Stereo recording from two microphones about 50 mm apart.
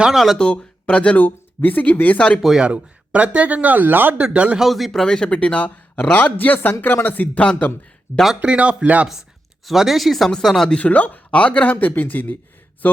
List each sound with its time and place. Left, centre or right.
0.1 s speech: centre
0.3 s speech: centre
1.1 s speech: left
2.1 s speech: left
2.6 s speech: right
4.2 s speech: right
4.9 s speech: centre
6.3 s speech: left
7.3 s speech: left
8.4 s speech: right
9.6 s speech: centre
10.8 s speech: left
11.7 s speech: left